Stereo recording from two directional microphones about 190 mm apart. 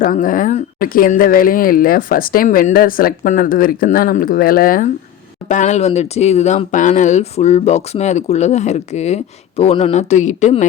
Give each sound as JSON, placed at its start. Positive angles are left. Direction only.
{"t": 0.0, "sound": "speech", "side_deg": 45}